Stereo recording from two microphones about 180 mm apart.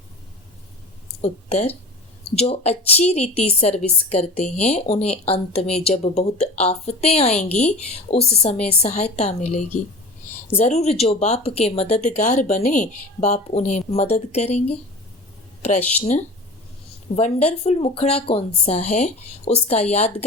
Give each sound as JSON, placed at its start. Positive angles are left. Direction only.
{"t": 1.2, "sound": "a woman's voice", "side_deg": 35}
{"t": 17.2, "sound": "a woman's voice", "side_deg": 35}